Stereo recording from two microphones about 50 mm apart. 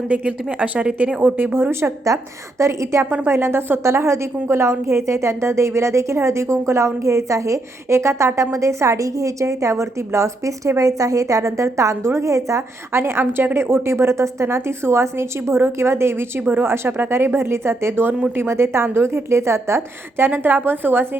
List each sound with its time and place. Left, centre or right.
0.1 s speech: right
2.1 s a woman's voice: right
2.6 s a woman's voice: right
13.0 s a woman's voice: right